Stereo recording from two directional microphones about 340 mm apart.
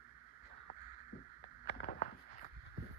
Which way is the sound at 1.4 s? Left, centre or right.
Left.